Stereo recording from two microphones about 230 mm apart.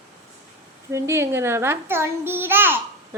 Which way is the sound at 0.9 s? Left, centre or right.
Centre.